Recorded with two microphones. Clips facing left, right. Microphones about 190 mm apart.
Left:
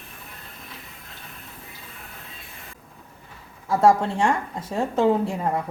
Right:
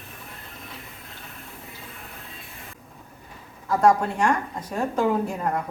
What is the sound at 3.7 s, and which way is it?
A woman's voice, 25° left (ahead or behind).